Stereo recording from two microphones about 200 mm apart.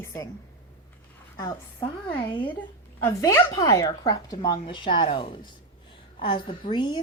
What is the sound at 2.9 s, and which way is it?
A woman's voice, 15° left (ahead or behind).